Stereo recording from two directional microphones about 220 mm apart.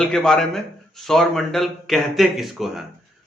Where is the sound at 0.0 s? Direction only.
Centre (ahead or behind).